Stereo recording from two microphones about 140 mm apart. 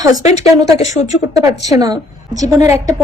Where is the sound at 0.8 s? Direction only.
55° left (ahead or behind).